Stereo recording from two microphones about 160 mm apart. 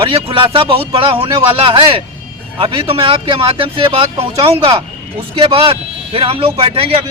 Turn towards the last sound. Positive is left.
turn(degrees=-35)  # may be behind; listen again after turning